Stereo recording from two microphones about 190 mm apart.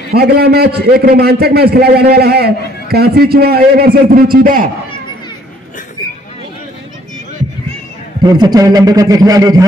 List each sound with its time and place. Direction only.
0.1 s a man's voice: 55° right (ahead or behind)
8.2 s a man's voice: 20° right (ahead or behind)